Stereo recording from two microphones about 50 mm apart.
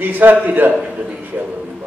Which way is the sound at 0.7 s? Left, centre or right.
Centre.